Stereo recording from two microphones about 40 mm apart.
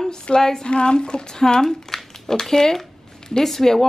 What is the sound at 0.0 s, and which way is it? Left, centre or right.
Speech, centre.